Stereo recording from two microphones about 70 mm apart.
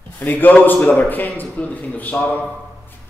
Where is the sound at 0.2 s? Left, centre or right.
Left.